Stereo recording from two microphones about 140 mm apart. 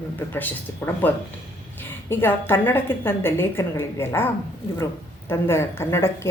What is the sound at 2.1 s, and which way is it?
Speech, 15° left (ahead or behind).